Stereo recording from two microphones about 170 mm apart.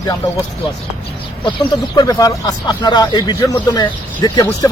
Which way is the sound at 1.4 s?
25° left (ahead or behind).